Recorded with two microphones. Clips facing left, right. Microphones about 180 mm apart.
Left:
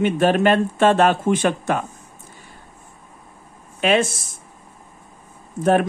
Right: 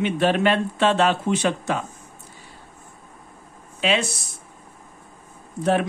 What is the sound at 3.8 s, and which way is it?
Speech, 50° left (ahead or behind).